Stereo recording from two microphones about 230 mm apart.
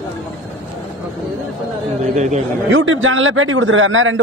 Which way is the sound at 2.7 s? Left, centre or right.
Right.